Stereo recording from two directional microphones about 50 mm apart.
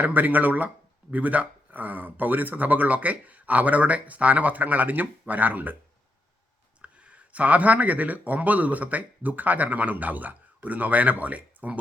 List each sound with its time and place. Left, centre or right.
0.0 s speech: right
6.8 s speech: right